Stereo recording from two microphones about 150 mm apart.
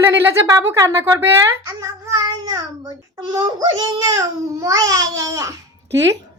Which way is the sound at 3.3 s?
25° right (ahead or behind).